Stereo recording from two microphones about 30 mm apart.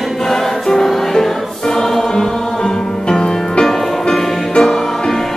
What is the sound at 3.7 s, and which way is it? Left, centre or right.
Music, centre.